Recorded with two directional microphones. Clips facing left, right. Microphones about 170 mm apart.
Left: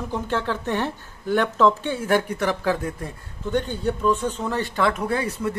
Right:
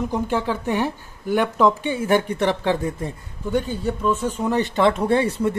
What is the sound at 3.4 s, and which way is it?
Speech, 5° right (ahead or behind).